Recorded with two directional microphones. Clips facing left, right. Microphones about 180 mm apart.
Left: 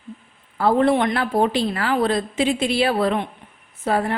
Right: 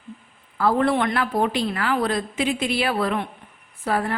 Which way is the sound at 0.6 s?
25° left (ahead or behind).